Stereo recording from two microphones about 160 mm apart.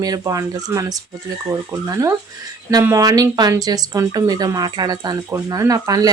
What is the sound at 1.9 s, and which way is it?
Speech, 20° right (ahead or behind).